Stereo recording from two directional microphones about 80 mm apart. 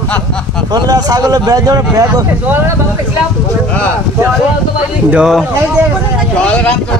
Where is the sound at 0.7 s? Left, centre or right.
Right.